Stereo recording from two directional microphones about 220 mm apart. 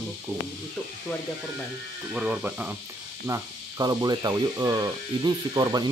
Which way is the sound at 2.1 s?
5° right (ahead or behind).